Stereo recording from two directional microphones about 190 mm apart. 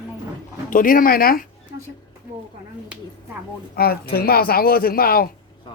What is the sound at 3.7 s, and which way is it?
Speech, 55° left (ahead or behind).